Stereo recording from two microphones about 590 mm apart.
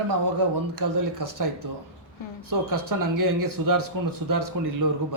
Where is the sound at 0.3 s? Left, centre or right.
Right.